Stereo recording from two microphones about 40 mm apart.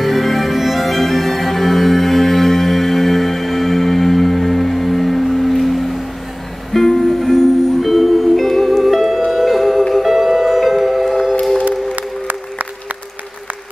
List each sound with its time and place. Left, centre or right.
0.0 s music: centre
11.6 s music: right